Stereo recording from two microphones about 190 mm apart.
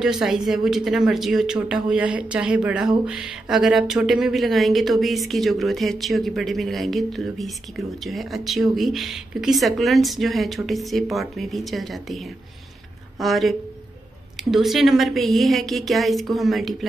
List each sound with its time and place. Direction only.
0.0 s speech: centre (ahead or behind)
13.2 s speech: centre (ahead or behind)